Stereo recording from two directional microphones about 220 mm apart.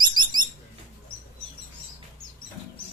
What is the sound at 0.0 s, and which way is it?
Bird, 20° right (ahead or behind).